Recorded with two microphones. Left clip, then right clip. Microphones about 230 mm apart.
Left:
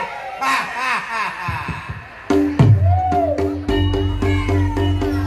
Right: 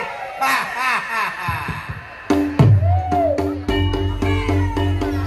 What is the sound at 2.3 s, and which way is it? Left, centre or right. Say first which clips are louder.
Music: left 1 dB; right.